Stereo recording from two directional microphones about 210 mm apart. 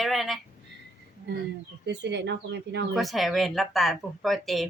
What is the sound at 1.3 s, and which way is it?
Speech, 55° right (ahead or behind).